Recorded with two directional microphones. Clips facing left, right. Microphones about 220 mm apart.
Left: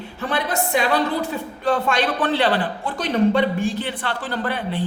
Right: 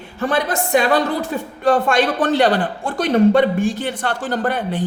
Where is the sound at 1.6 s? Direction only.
45° right (ahead or behind).